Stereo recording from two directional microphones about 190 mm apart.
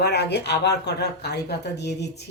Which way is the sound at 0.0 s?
60° left (ahead or behind).